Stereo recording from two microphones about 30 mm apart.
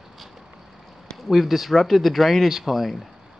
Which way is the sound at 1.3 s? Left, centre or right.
Centre.